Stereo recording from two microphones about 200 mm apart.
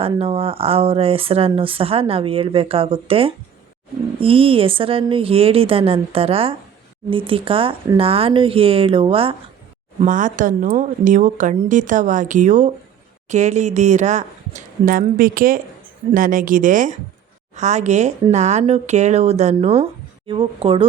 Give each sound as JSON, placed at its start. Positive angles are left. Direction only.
{"t": 0.0, "sound": "speech", "side_deg": -30}
{"t": 10.0, "sound": "speech", "side_deg": -40}